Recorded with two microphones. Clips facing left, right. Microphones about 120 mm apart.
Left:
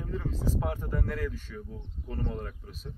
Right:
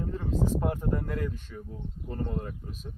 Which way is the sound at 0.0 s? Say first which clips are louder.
Right 3 dB; centre (ahead or behind).